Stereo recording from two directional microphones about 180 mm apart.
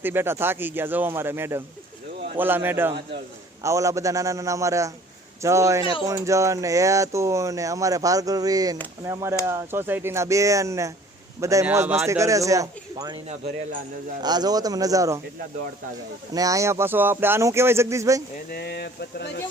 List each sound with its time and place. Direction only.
0.0 s speech: 10° right (ahead or behind)
14.2 s speech: 25° right (ahead or behind)
16.3 s speech: 20° right (ahead or behind)
18.5 s speech: 60° left (ahead or behind)